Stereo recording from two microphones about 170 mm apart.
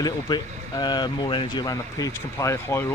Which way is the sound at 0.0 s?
25° left (ahead or behind).